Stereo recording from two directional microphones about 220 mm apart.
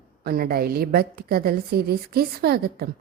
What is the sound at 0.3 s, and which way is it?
Speech, 45° right (ahead or behind).